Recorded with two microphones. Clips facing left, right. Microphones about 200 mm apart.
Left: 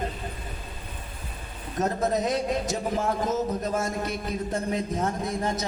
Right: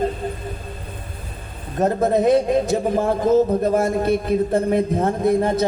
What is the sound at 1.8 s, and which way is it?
A man's voice, 55° right (ahead or behind).